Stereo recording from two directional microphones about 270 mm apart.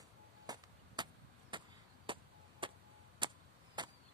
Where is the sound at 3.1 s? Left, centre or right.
Centre.